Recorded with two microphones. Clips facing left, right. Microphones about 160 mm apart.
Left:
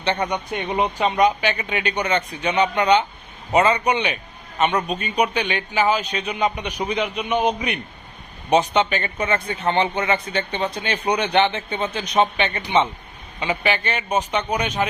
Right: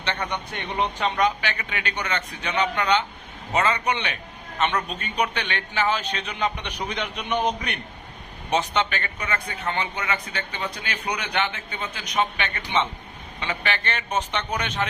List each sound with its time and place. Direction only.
0.0 s a man's voice: 15° left (ahead or behind)
8.4 s a man's voice: 20° left (ahead or behind)